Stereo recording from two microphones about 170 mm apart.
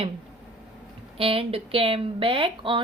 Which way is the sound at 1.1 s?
35° right (ahead or behind).